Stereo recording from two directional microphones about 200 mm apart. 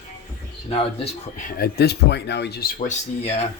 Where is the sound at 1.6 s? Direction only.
55° left (ahead or behind).